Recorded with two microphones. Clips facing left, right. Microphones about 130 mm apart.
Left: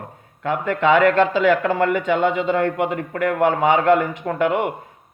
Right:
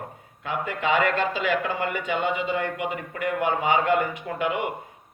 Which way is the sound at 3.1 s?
75° left (ahead or behind).